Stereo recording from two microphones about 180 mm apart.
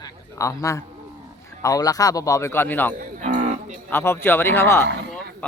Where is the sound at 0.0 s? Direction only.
15° left (ahead or behind).